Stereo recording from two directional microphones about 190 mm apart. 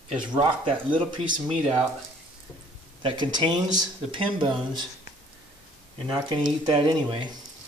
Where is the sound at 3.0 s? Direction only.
25° right (ahead or behind).